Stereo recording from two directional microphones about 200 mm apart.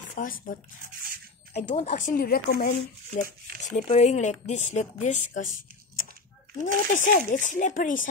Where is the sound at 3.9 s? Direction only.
35° left (ahead or behind).